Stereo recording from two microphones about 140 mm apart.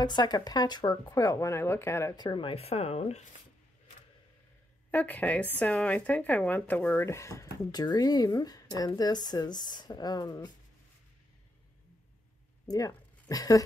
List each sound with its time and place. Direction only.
0.0 s speech: 30° left (ahead or behind)
2.1 s speech: 35° left (ahead or behind); by 3.3 s 50° left (ahead or behind)
4.9 s speech: 10° left (ahead or behind); by 10.5 s 30° left (ahead or behind)
12.6 s speech: 25° left (ahead or behind)